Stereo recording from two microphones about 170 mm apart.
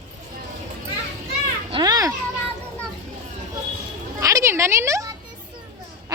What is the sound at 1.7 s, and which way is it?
Children playing, 20° right (ahead or behind).